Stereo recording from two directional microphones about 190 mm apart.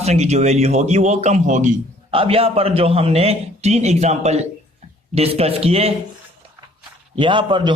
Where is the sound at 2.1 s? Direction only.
30° right (ahead or behind).